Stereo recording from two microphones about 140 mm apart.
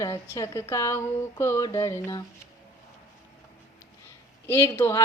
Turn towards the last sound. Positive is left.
turn(degrees=20)  # may be behind; listen again after turning